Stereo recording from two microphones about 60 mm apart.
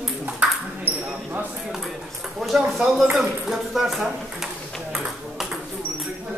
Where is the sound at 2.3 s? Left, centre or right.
Centre.